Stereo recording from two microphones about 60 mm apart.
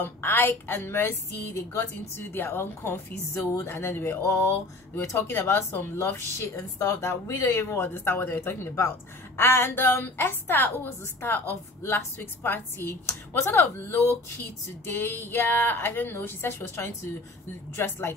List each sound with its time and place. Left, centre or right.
0.0 s a woman's voice: left
3.3 s speech: left
3.7 s a woman's voice: left
7.8 s a woman's voice: left